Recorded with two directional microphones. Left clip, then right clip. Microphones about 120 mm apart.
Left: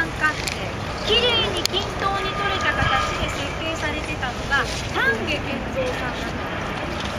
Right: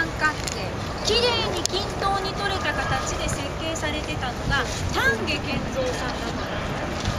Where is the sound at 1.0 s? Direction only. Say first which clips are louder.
Left 3 dB; 20° right (ahead or behind).